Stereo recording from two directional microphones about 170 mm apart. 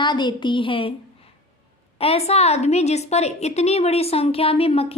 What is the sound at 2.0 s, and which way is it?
A woman's voice, 35° left (ahead or behind).